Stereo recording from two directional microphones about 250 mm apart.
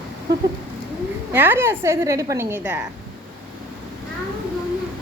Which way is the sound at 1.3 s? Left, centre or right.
Centre.